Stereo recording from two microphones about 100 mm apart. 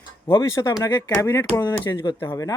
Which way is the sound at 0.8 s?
45° left (ahead or behind).